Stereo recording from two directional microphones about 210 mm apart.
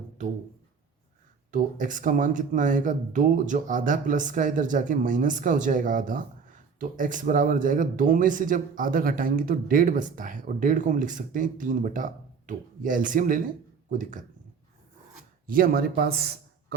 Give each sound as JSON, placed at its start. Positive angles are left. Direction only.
{"t": 0.2, "sound": "speech", "side_deg": -35}
{"t": 1.5, "sound": "speech", "side_deg": -40}
{"t": 15.4, "sound": "a man's voice", "side_deg": -45}